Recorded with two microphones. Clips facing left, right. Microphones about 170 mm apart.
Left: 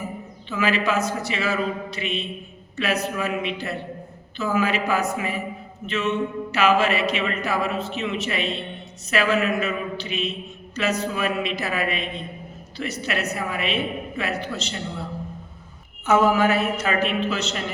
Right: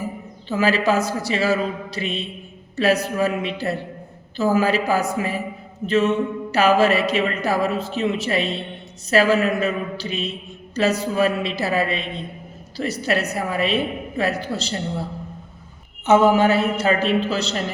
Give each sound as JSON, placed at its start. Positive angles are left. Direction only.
{"t": 0.4, "sound": "speech", "side_deg": -35}
{"t": 16.0, "sound": "speech", "side_deg": -25}